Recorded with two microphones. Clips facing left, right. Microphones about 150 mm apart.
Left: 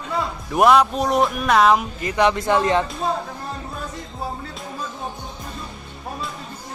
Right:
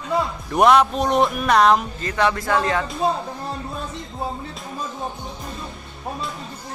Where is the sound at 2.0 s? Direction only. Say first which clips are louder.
Left 5 dB; 15° left (ahead or behind).